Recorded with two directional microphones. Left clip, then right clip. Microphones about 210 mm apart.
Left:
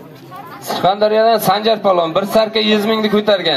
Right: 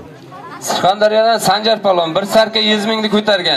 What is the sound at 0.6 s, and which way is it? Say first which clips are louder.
A man's voice: right 1 dB; 45° right (ahead or behind).